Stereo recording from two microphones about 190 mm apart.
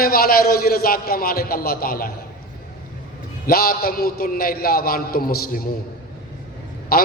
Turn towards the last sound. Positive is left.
turn(degrees=55)  # may be behind; listen again after turning